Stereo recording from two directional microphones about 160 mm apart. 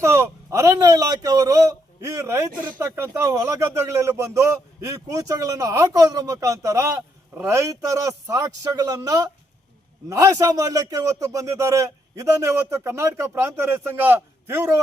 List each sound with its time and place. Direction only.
0.0 s a man's voice: 15° right (ahead or behind)